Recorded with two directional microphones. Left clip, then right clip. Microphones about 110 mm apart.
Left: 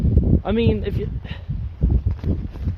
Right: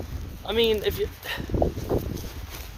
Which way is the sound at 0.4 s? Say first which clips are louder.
Right 2 dB; 25° right (ahead or behind).